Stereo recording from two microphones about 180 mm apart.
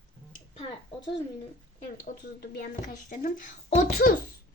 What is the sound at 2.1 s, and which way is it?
A child's voice, 45° left (ahead or behind).